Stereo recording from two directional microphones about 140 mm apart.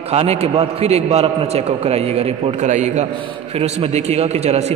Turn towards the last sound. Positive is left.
turn(degrees=-50)  # may be behind; listen again after turning